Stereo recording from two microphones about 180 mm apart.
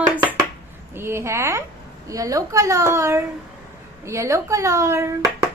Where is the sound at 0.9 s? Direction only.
15° right (ahead or behind).